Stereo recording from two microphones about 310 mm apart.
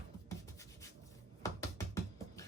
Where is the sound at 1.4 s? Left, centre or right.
Centre.